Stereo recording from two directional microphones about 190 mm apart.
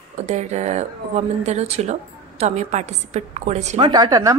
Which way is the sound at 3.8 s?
20° right (ahead or behind).